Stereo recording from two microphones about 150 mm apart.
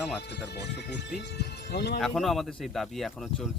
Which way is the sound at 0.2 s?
90° left.